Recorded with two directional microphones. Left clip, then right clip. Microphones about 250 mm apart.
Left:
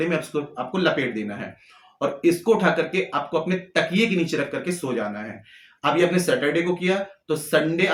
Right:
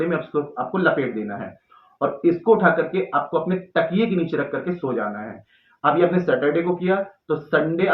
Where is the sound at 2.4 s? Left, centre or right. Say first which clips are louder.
Right 6 dB; left.